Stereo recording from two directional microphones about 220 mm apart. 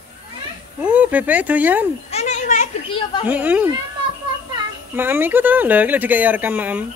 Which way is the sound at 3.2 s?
5° right (ahead or behind).